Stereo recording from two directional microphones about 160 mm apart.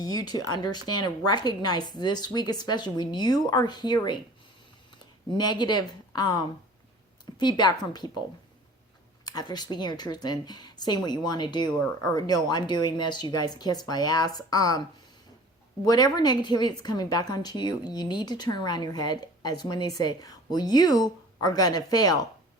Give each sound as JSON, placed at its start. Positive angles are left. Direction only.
{"t": 0.0, "sound": "a woman's voice", "side_deg": 25}
{"t": 5.4, "sound": "a woman's voice", "side_deg": 25}
{"t": 9.2, "sound": "a woman's voice", "side_deg": 25}
{"t": 15.9, "sound": "a woman's voice", "side_deg": 25}